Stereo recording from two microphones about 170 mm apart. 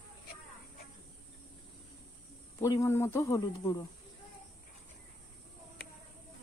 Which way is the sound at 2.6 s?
20° left (ahead or behind).